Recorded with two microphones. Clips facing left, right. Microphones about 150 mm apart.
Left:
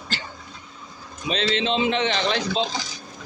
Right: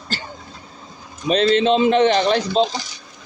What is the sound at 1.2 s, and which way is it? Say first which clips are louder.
Speech: right 8 dB; 45° right (ahead or behind).